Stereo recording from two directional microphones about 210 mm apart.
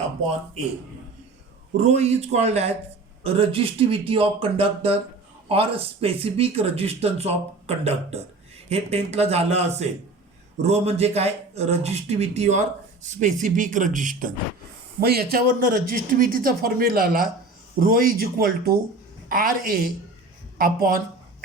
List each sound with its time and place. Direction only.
1.7 s speech: 30° right (ahead or behind)